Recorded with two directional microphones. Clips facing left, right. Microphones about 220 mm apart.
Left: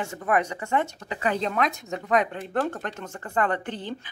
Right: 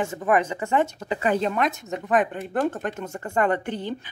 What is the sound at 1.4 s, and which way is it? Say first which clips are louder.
Speech: right 2 dB; 5° right (ahead or behind).